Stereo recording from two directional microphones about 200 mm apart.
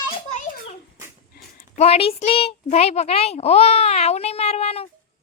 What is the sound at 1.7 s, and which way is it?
A child's voice, 30° left (ahead or behind).